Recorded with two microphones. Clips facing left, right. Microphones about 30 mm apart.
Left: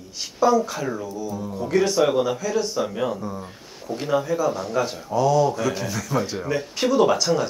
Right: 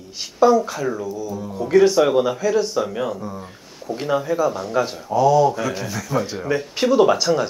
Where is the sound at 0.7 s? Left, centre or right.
Centre.